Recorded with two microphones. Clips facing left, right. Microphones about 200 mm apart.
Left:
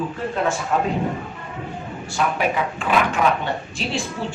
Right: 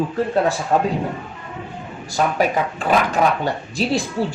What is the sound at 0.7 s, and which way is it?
Speech, 35° right (ahead or behind).